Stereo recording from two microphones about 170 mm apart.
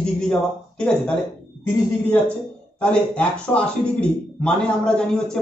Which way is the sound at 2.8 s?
5° left (ahead or behind).